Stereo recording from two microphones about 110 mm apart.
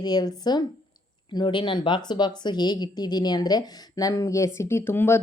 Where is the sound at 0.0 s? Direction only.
40° left (ahead or behind).